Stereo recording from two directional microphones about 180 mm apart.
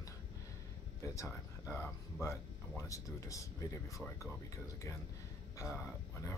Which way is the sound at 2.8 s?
20° left (ahead or behind).